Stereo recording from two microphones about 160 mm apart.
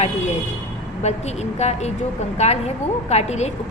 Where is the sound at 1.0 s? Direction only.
45° left (ahead or behind).